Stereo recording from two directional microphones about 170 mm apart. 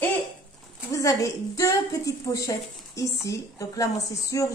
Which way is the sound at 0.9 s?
20° left (ahead or behind).